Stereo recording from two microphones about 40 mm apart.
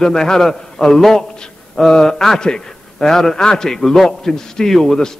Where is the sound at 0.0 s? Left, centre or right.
Centre.